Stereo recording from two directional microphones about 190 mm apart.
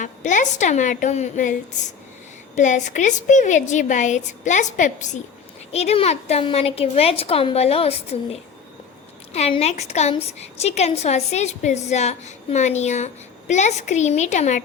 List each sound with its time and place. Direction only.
0.0 s a woman's voice: 40° left (ahead or behind)
2.6 s a woman's voice: 40° left (ahead or behind)